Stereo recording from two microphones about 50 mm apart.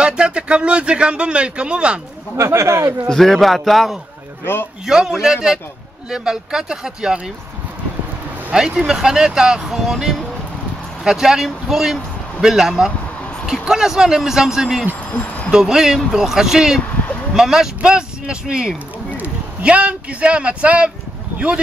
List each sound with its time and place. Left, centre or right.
0.0 s speech: centre
2.3 s speech: right
3.1 s a man's voice: centre
4.8 s speech: centre
8.5 s speech: centre
15.0 s a sound: left
15.5 s speech: centre
19.1 s a man's voice: right